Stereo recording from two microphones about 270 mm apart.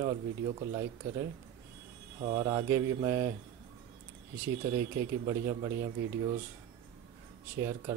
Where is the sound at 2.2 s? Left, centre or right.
Centre.